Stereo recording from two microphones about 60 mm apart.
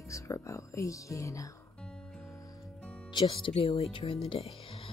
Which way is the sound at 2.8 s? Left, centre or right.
Centre.